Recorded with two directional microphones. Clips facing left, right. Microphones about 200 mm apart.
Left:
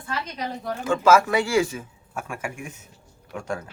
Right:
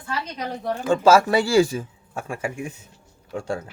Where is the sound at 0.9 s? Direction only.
30° right (ahead or behind).